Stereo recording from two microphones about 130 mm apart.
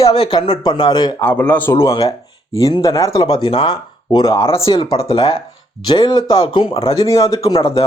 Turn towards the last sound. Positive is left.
turn(degrees=25)  # may be behind; listen again after turning